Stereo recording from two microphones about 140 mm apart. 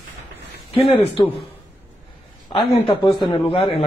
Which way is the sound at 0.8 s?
40° left (ahead or behind).